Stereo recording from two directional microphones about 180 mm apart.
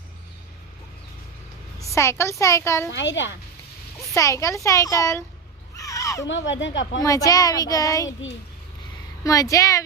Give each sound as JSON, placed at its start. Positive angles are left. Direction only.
{"t": 1.9, "sound": "speech", "side_deg": 15}
{"t": 2.9, "sound": "a woman's voice", "side_deg": 90}
{"t": 4.1, "sound": "speech", "side_deg": 15}
{"t": 5.7, "sound": "a sound", "side_deg": 20}
{"t": 6.2, "sound": "a woman's voice", "side_deg": 90}
{"t": 7.0, "sound": "speech", "side_deg": 20}
{"t": 9.2, "sound": "speech", "side_deg": 20}